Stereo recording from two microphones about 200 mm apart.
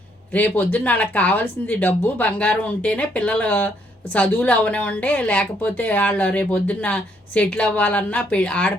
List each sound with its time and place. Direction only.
0.3 s speech: 10° left (ahead or behind)